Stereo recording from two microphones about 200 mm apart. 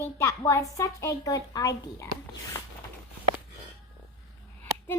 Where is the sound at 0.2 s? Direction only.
15° left (ahead or behind).